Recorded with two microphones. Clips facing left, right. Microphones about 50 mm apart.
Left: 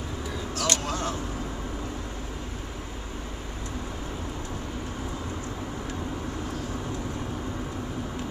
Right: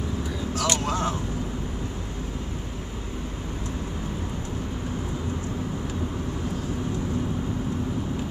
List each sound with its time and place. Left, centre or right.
0.7 s speech: centre